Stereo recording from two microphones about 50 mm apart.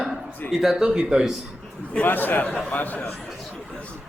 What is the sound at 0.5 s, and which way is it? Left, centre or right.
Speech, centre.